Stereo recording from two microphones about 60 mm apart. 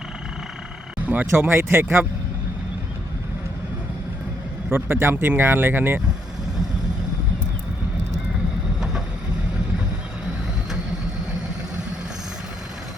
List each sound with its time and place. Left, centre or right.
1.0 s speech: right
1.5 s speech: right
4.7 s speech: right